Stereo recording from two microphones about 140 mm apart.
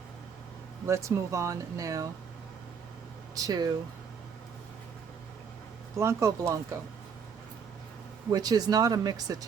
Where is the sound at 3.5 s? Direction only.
25° right (ahead or behind).